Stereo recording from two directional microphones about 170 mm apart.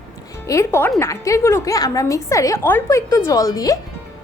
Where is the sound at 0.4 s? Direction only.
20° left (ahead or behind).